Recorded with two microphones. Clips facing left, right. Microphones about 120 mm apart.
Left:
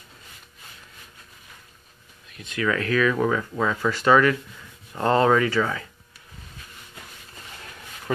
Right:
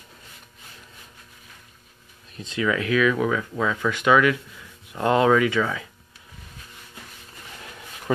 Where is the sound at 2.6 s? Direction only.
10° right (ahead or behind).